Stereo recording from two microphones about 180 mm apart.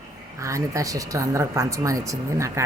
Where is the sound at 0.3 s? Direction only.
15° right (ahead or behind).